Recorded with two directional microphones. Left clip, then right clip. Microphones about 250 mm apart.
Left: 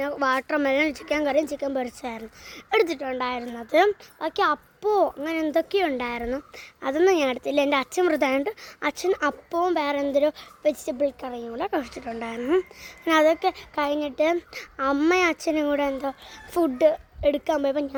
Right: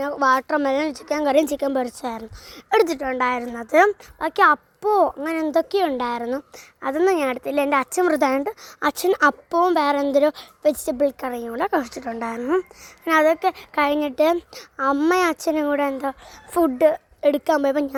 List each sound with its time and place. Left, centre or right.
0.0 s speech: centre
1.2 s fowl: right
6.8 s speech: centre
8.8 s fowl: right
14.3 s speech: centre
16.6 s fowl: centre